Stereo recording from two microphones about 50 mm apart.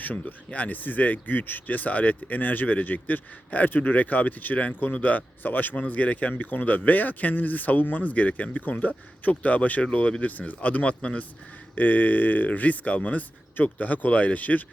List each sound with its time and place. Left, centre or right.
0.0 s speech: left
11.7 s speech: left